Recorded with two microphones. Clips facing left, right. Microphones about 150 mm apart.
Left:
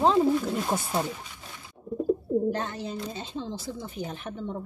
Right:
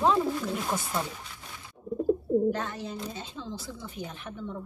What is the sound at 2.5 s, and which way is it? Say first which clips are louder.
Speech: left 1 dB; 30° left (ahead or behind).